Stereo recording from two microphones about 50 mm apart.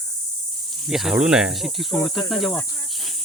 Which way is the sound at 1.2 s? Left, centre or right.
Centre.